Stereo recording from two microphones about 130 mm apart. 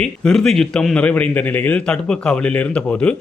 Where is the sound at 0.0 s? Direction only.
5° left (ahead or behind).